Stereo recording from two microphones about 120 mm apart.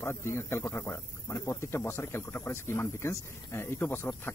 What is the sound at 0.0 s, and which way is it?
Speech, 20° left (ahead or behind).